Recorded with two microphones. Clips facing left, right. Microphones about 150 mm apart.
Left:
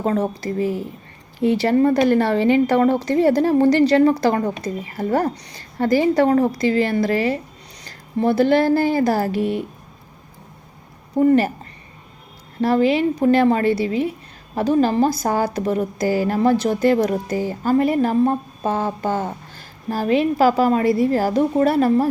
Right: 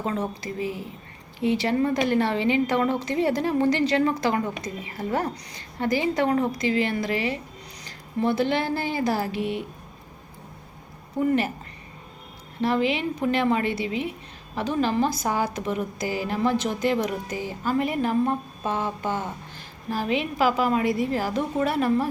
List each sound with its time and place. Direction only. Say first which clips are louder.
0.0 s a woman's voice: left 7 dB; 40° left (ahead or behind)
11.2 s a woman's voice: left 8 dB; 40° left (ahead or behind)
12.6 s a woman's voice: left 7 dB; 40° left (ahead or behind)